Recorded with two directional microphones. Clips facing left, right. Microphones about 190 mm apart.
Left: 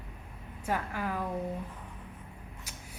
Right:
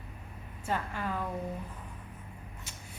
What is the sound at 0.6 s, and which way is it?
Speech, 10° left (ahead or behind).